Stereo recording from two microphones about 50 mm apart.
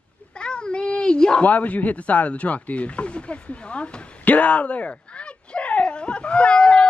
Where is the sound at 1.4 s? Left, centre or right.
Left.